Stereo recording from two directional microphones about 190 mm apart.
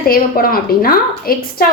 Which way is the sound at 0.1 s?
50° left (ahead or behind).